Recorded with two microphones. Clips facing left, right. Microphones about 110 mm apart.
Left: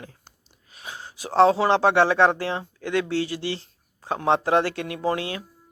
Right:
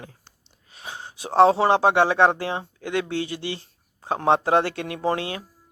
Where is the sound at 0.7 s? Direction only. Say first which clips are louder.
Right 1 dB; 25° right (ahead or behind).